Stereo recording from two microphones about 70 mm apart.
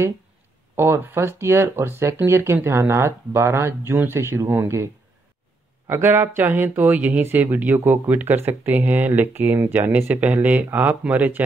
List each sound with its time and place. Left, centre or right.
0.7 s speech: right
5.9 s speech: right